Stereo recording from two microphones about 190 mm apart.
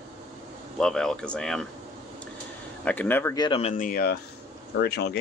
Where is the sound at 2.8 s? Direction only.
10° left (ahead or behind).